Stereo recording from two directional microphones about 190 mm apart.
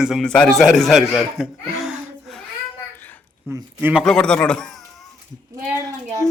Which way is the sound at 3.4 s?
10° right (ahead or behind).